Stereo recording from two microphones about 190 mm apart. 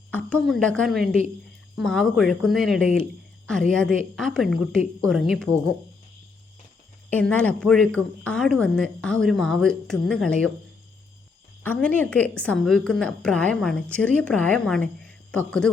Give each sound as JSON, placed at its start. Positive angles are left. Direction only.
{"t": 0.1, "sound": "speech", "side_deg": 5}
{"t": 7.1, "sound": "speech", "side_deg": 5}
{"t": 11.6, "sound": "a woman's voice", "side_deg": 10}